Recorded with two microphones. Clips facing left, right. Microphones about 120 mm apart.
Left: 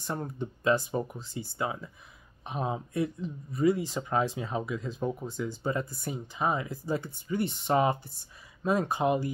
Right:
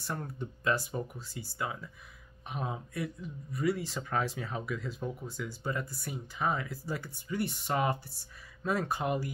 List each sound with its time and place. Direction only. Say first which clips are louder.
0.0 s speech: left 4 dB; 25° left (ahead or behind)